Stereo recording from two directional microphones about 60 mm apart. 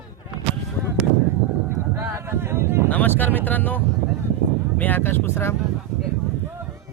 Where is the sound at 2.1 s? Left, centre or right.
Right.